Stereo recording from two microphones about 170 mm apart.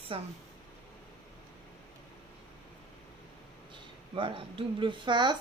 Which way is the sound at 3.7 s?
30° right (ahead or behind).